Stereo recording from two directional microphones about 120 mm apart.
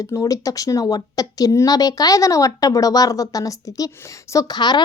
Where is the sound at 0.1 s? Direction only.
30° left (ahead or behind).